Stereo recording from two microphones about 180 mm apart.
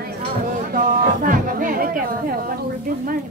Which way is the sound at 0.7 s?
50° right (ahead or behind).